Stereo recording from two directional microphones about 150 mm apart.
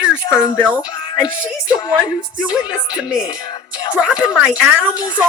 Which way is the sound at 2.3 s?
10° right (ahead or behind).